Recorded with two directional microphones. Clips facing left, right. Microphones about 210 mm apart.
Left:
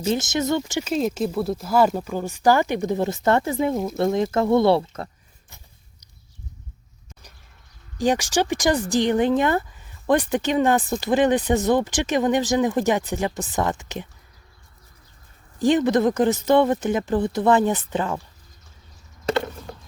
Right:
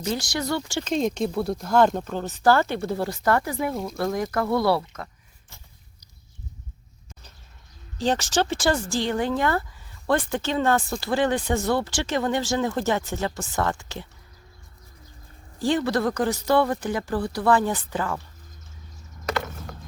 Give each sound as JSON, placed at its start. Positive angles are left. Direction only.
{"t": 0.0, "sound": "speech", "side_deg": 20}
{"t": 0.9, "sound": "speech", "side_deg": 5}
{"t": 7.9, "sound": "speech", "side_deg": 15}
{"t": 15.5, "sound": "speech", "side_deg": 20}
{"t": 19.2, "sound": "a sound", "side_deg": 25}